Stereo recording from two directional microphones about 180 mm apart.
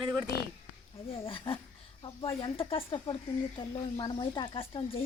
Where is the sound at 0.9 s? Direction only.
30° left (ahead or behind).